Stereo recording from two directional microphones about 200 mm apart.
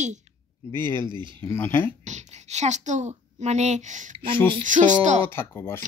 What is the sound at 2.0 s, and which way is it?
A woman's voice, 35° right (ahead or behind).